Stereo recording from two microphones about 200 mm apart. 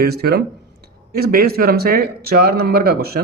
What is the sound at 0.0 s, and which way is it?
Speech, 50° right (ahead or behind).